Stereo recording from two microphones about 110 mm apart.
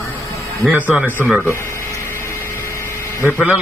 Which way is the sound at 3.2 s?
10° right (ahead or behind).